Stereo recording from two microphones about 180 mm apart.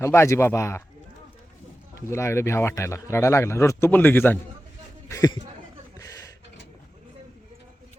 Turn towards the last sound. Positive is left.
turn(degrees=15)  # may be behind; listen again after turning